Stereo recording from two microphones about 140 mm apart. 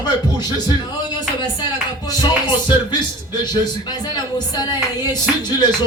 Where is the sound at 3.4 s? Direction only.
30° left (ahead or behind).